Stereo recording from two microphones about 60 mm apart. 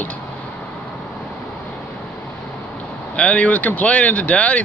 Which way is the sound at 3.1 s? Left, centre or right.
Left.